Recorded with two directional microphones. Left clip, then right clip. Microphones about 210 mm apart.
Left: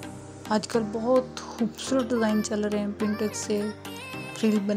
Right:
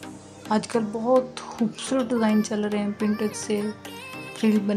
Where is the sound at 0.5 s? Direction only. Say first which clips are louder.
Right 1 dB; 20° left (ahead or behind).